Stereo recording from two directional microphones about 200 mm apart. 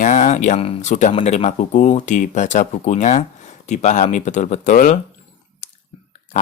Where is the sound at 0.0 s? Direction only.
40° left (ahead or behind).